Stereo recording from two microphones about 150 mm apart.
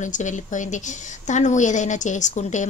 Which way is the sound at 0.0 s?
55° left (ahead or behind).